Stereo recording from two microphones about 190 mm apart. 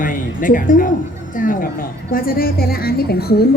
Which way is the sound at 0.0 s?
45° left (ahead or behind).